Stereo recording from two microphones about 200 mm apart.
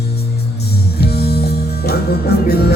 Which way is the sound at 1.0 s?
55° left (ahead or behind).